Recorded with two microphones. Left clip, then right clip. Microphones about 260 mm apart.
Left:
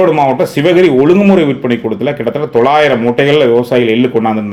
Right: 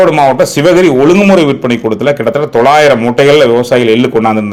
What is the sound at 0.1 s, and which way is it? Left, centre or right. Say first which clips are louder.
Speech: right 3 dB; right.